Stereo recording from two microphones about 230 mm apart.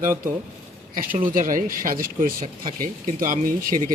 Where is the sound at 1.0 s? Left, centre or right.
Right.